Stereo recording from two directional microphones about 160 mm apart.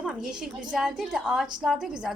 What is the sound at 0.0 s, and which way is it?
A woman's voice, 5° right (ahead or behind).